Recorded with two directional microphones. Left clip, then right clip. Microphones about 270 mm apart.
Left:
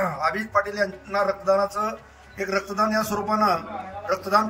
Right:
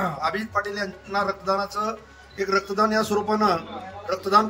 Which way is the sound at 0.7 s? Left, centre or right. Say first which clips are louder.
Left 3 dB; centre.